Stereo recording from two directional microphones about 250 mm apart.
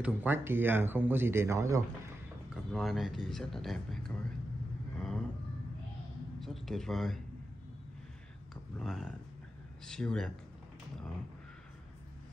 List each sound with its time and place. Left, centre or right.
0.0 s speech: centre
2.5 s speech: centre
4.9 s vehicle: centre
6.4 s speech: centre
8.7 s speech: centre